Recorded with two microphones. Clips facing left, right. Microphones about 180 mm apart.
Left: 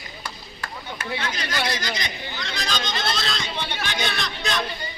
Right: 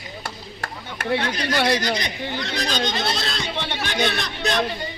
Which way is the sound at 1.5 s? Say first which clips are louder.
Right 8 dB; 65° right (ahead or behind).